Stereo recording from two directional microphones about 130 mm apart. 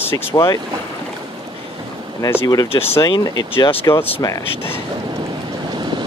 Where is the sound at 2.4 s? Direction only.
25° left (ahead or behind).